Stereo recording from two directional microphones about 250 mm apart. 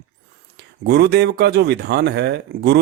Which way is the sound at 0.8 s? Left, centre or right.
Right.